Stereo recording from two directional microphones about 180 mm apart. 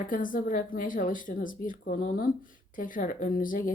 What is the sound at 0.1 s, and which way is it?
Speech, 50° left (ahead or behind).